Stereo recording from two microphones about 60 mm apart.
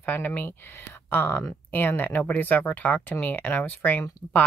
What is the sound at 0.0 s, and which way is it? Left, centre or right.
Speech, left.